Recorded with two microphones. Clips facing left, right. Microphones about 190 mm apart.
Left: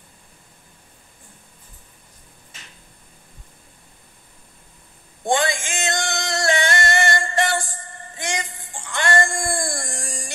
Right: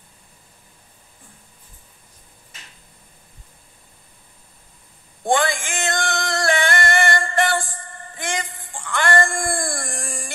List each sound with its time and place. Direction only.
5.3 s music: 20° left (ahead or behind)